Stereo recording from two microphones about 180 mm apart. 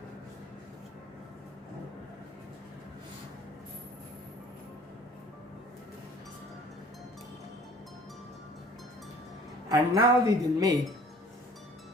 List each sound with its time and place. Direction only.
9.6 s a woman's voice: 20° right (ahead or behind)